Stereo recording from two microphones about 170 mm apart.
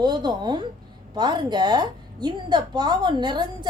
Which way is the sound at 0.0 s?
25° right (ahead or behind).